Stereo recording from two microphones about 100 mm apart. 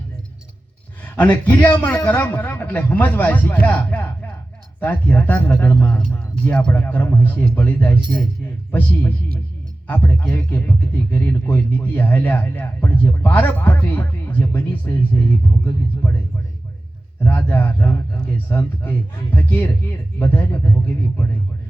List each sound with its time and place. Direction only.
1.0 s speech: 15° left (ahead or behind)
5.9 s a man's voice: 10° left (ahead or behind)
17.2 s a man's voice: 20° left (ahead or behind)